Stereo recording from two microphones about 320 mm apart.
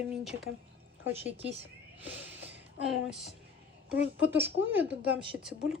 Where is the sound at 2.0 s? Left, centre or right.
Centre.